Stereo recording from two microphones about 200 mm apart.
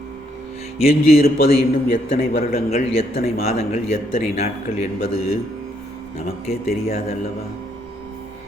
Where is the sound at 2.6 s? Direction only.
30° left (ahead or behind).